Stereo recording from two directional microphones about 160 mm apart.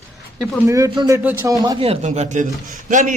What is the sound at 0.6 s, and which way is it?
Speech, 20° right (ahead or behind).